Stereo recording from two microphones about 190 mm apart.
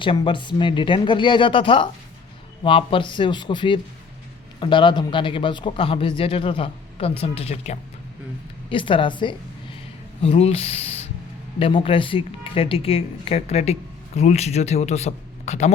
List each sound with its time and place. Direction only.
0.0 s speech: 25° left (ahead or behind)